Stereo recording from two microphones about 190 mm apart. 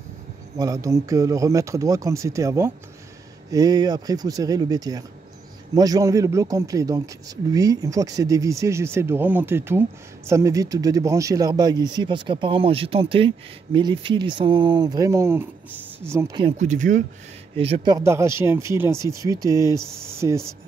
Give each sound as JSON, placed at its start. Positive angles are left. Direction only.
{"t": 0.6, "sound": "a man's voice", "side_deg": -20}
{"t": 16.3, "sound": "speech", "side_deg": -35}
{"t": 17.6, "sound": "a man's voice", "side_deg": -30}